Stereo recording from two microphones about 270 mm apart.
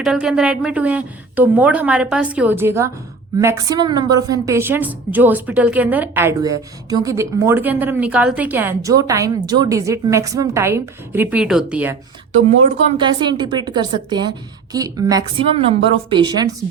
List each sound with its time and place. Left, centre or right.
0.0 s a woman's voice: centre
13.0 s a woman's voice: centre